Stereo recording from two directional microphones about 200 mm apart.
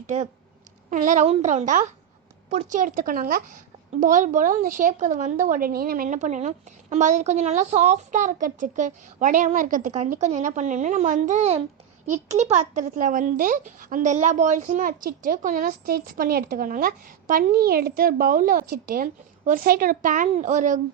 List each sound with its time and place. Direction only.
0.9 s a woman's voice: 40° right (ahead or behind)